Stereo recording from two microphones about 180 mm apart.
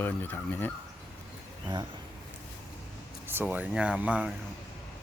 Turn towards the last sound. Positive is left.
turn(degrees=-5)  # may be behind; listen again after turning